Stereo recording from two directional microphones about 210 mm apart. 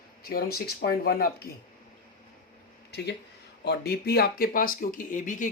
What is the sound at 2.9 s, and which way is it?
Speech, 50° left (ahead or behind).